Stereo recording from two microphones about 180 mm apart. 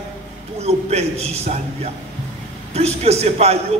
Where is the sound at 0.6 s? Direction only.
35° right (ahead or behind).